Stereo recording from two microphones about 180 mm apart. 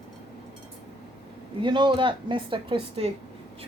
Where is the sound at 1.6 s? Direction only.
25° right (ahead or behind).